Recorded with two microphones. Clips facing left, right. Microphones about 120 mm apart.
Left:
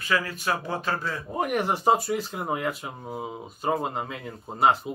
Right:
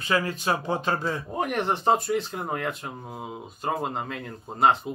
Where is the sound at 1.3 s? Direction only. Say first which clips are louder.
Left 2 dB; 5° left (ahead or behind).